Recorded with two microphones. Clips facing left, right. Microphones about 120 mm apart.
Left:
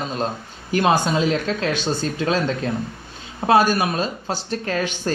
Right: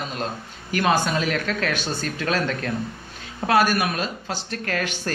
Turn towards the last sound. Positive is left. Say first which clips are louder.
# left 3 dB
turn(degrees=25)  # may be behind; listen again after turning